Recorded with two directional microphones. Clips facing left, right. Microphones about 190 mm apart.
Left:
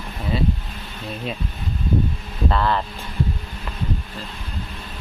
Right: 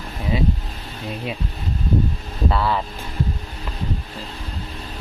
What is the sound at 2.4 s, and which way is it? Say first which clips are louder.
Speech: even; 5° right (ahead or behind).